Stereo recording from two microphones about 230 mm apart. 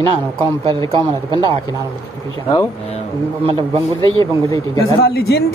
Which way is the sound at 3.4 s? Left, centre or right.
Right.